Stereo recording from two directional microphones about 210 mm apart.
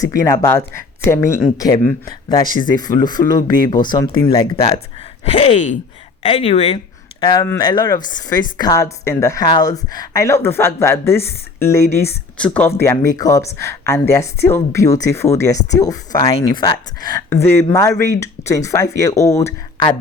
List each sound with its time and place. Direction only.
0.0 s speech: 15° left (ahead or behind)
5.3 s speech: 30° left (ahead or behind)
7.2 s speech: 20° left (ahead or behind)